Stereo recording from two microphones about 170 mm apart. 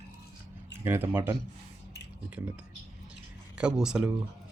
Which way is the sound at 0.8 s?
15° right (ahead or behind).